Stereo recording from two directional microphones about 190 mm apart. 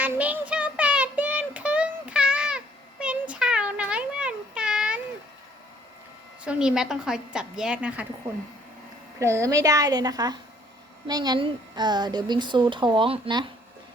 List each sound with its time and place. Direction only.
0.0 s child singing: 10° right (ahead or behind)
6.4 s a woman's voice: 5° right (ahead or behind)
9.1 s a woman's voice: 15° right (ahead or behind)